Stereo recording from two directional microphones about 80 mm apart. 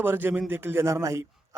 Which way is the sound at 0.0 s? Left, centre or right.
Right.